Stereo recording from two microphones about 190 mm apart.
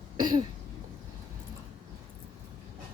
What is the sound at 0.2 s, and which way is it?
Throat clearing, 20° right (ahead or behind).